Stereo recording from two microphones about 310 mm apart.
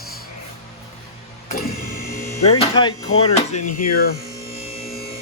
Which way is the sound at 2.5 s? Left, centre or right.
Centre.